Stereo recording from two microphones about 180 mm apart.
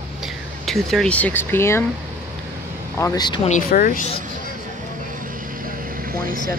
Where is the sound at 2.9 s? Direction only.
20° left (ahead or behind).